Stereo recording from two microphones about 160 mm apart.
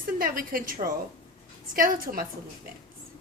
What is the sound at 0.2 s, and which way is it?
A woman's voice, 60° right (ahead or behind).